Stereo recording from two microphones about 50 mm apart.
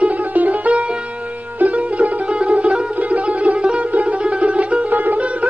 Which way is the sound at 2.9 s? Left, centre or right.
Right.